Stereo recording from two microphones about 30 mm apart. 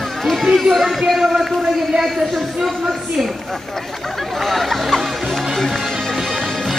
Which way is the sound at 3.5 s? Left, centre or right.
Centre.